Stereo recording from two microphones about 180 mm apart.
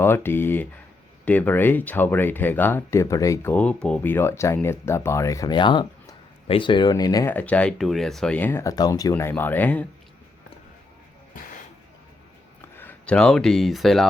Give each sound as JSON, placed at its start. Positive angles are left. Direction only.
{"t": 0.0, "sound": "speech", "side_deg": 10}
{"t": 7.3, "sound": "speech", "side_deg": 10}
{"t": 12.6, "sound": "speech", "side_deg": 10}